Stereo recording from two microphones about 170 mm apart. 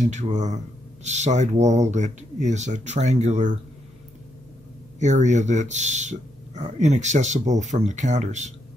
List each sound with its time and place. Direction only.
0.0 s speech: 45° right (ahead or behind)
4.9 s speech: 45° right (ahead or behind)